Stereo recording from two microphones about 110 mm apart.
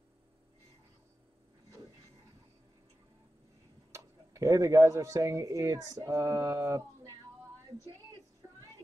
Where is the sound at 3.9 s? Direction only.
30° right (ahead or behind).